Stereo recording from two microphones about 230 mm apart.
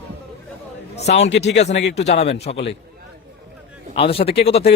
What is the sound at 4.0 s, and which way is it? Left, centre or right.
Speech, left.